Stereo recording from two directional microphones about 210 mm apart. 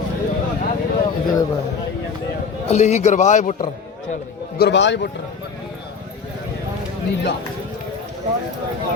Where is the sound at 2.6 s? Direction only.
30° left (ahead or behind).